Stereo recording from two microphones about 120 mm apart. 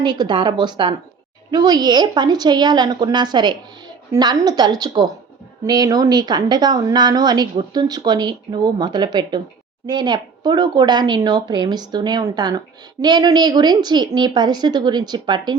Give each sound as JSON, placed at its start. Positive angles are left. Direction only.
{"t": 0.0, "sound": "speech", "side_deg": -35}